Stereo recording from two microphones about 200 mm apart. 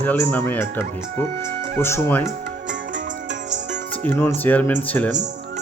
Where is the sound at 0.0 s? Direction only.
10° left (ahead or behind).